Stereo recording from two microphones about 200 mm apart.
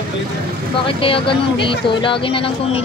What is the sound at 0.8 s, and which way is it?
Speech, 25° left (ahead or behind).